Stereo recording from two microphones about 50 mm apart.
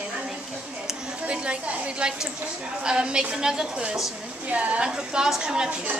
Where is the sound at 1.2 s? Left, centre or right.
Right.